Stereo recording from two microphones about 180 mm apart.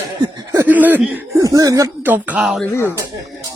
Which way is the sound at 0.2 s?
25° right (ahead or behind).